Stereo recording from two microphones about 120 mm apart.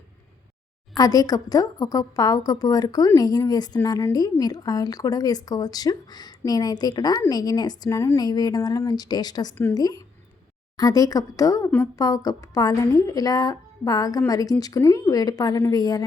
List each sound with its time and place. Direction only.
0.9 s speech: 30° left (ahead or behind)